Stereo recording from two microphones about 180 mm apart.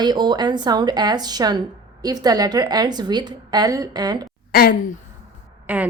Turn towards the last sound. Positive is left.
turn(degrees=-10)  # may be behind; listen again after turning